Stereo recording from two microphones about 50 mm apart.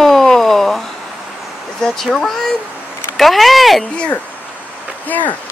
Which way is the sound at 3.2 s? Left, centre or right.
Centre.